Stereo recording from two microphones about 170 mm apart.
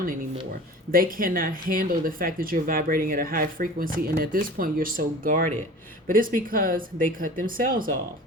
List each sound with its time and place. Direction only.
0.9 s speech: 55° right (ahead or behind)